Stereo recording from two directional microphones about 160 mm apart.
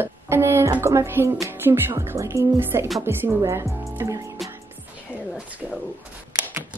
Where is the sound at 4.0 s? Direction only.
20° right (ahead or behind).